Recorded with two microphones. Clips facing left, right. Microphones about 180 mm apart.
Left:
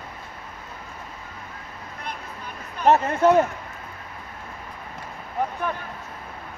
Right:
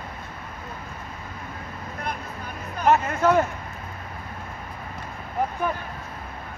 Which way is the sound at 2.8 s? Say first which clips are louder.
Left 2 dB; 30° left (ahead or behind).